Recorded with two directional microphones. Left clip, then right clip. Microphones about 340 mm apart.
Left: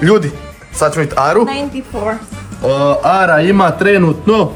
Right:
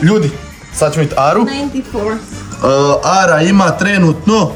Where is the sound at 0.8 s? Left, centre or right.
Centre.